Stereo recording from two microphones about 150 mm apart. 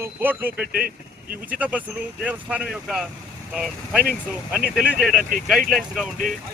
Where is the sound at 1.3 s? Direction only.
10° right (ahead or behind).